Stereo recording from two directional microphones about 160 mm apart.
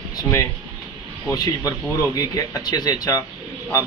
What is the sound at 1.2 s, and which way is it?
Speech, 20° left (ahead or behind).